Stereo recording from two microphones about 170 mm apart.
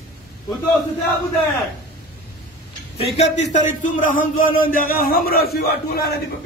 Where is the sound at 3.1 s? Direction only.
45° left (ahead or behind); by 6.2 s 65° left (ahead or behind).